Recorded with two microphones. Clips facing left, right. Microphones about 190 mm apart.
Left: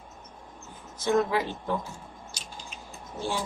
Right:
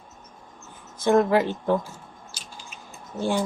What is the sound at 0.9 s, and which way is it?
Speech, 55° right (ahead or behind).